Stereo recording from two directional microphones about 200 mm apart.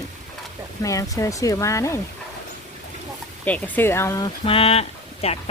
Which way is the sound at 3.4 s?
10° left (ahead or behind).